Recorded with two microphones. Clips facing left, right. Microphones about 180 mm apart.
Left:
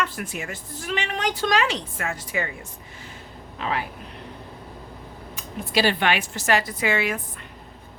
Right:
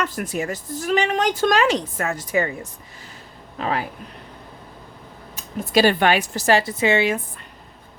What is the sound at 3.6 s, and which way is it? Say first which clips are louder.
Speech: right 3 dB; 40° right (ahead or behind).